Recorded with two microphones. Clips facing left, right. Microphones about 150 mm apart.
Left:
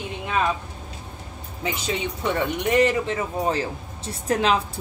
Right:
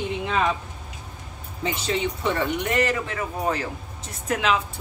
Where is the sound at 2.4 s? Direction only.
20° left (ahead or behind).